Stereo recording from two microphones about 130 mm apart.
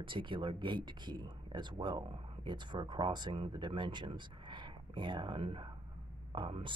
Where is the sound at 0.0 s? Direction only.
40° right (ahead or behind).